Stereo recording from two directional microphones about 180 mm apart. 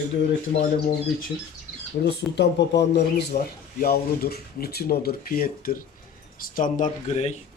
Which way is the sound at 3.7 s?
55° left (ahead or behind).